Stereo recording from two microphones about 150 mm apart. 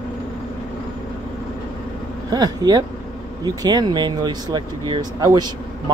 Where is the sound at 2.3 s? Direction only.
25° right (ahead or behind).